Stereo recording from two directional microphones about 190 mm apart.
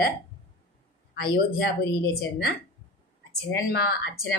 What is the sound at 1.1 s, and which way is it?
Speech, 55° left (ahead or behind).